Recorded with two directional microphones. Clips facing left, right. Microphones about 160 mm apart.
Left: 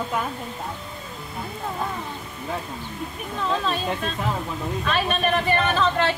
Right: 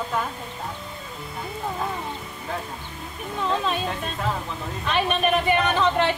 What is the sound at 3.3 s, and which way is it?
Speech, 15° right (ahead or behind).